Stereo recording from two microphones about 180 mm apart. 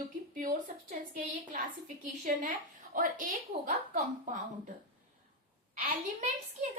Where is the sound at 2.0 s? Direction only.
45° right (ahead or behind).